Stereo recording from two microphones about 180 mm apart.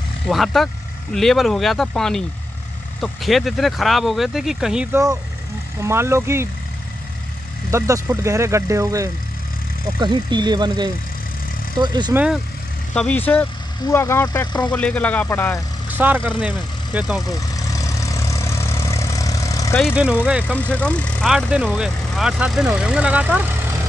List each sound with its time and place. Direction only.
0.3 s speech: centre (ahead or behind)
5.8 s speech: 15° right (ahead or behind)
7.7 s speech: 15° right (ahead or behind)
12.1 s speech: 10° right (ahead or behind)
12.9 s speech: 5° left (ahead or behind)
14.7 s speech: 5° left (ahead or behind)
15.9 s speech: 10° right (ahead or behind)
17.3 s vehicle: 20° left (ahead or behind)
19.8 s speech: 5° right (ahead or behind)
20.5 s speech: 10° left (ahead or behind); by 23.4 s 5° right (ahead or behind)